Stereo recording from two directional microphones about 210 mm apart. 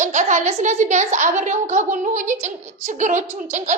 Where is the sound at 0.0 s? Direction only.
35° right (ahead or behind).